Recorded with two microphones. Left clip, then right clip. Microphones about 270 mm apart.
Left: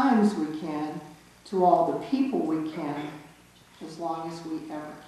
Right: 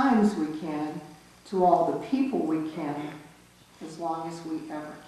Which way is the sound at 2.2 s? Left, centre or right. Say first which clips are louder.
Even; left.